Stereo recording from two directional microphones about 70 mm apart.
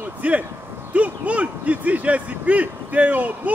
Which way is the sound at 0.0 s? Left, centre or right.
Right.